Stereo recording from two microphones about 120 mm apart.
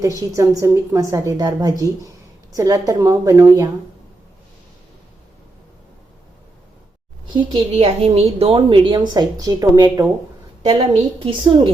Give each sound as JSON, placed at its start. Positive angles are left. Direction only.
{"t": 0.0, "sound": "a woman's voice", "side_deg": -25}
{"t": 7.3, "sound": "a woman's voice", "side_deg": -40}
{"t": 7.8, "sound": "a woman's voice", "side_deg": -60}
{"t": 10.6, "sound": "a woman's voice", "side_deg": -55}